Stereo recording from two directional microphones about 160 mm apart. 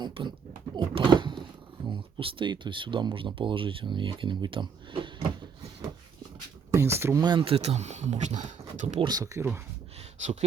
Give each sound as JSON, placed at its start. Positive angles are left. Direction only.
{"t": 0.0, "sound": "speech", "side_deg": -30}
{"t": 0.8, "sound": "a sound", "side_deg": -30}
{"t": 1.8, "sound": "speech", "side_deg": -30}
{"t": 6.7, "sound": "speech", "side_deg": -15}
{"t": 7.2, "sound": "speech", "side_deg": -30}
{"t": 9.0, "sound": "speech", "side_deg": -25}